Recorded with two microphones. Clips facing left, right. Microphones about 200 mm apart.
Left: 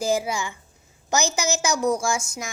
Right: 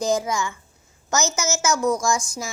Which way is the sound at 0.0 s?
10° left (ahead or behind).